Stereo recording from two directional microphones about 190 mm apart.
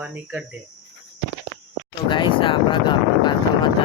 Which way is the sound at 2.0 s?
25° left (ahead or behind).